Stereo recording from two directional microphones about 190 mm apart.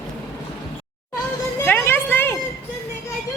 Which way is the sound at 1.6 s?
10° left (ahead or behind).